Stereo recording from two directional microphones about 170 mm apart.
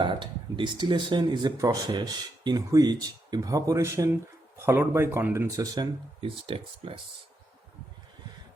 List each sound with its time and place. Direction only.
0.0 s speech: 25° right (ahead or behind)